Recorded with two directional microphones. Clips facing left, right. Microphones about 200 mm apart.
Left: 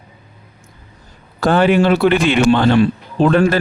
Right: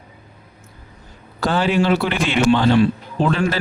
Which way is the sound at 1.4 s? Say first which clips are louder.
Left 5 dB; 55° left (ahead or behind).